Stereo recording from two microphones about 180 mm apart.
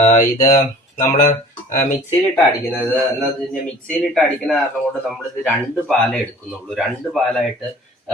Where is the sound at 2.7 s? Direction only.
10° left (ahead or behind).